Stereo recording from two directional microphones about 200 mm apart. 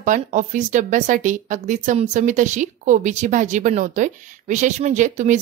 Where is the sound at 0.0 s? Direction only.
40° right (ahead or behind).